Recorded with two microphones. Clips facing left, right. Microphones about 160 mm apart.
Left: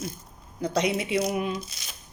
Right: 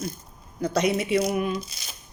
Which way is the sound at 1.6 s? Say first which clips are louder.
Right 1 dB; centre (ahead or behind).